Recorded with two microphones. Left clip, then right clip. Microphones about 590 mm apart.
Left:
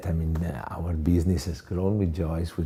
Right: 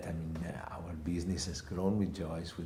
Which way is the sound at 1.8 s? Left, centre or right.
Left.